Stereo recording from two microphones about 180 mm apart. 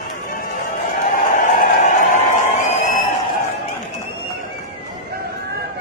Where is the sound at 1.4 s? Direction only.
50° left (ahead or behind).